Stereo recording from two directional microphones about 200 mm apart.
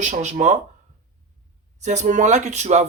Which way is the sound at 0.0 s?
35° right (ahead or behind).